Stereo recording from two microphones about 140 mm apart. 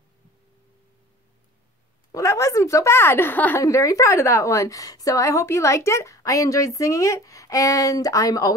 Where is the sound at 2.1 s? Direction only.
20° left (ahead or behind).